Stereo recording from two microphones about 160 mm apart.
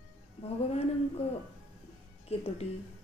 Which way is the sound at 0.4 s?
40° left (ahead or behind).